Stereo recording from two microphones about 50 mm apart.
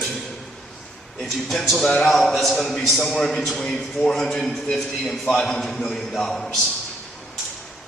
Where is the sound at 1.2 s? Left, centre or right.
Centre.